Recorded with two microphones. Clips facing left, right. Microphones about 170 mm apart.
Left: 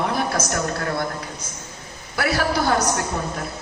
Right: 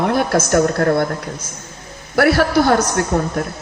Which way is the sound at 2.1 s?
55° right (ahead or behind).